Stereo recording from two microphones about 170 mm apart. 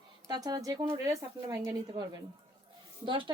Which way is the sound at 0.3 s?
25° right (ahead or behind).